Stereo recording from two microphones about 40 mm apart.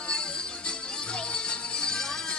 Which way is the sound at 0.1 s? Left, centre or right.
Left.